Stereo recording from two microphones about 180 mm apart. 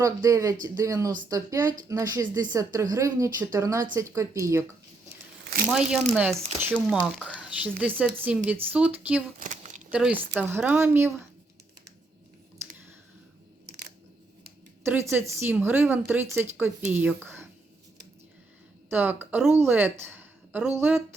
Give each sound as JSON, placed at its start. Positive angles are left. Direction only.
{"t": 0.0, "sound": "a woman's voice", "side_deg": -15}
{"t": 5.5, "sound": "crumpling", "side_deg": -60}
{"t": 6.1, "sound": "speech", "side_deg": -10}
{"t": 9.4, "sound": "a sound", "side_deg": -40}
{"t": 9.9, "sound": "speech", "side_deg": -10}
{"t": 14.8, "sound": "speech", "side_deg": -10}
{"t": 18.9, "sound": "a woman's voice", "side_deg": -10}